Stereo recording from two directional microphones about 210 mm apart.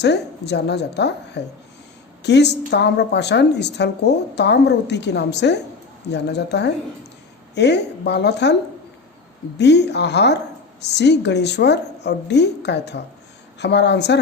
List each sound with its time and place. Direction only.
0.0 s a woman's voice: 55° left (ahead or behind)
9.6 s a woman's voice: 55° left (ahead or behind)